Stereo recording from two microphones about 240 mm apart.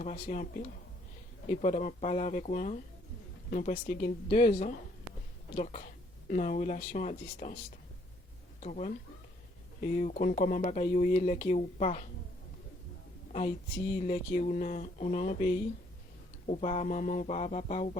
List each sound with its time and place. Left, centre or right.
0.0 s speech: left
8.6 s speech: left
14.0 s speech: left